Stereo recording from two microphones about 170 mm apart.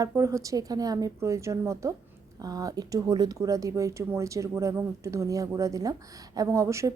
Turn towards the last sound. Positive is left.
turn(degrees=-20)  # may be behind; listen again after turning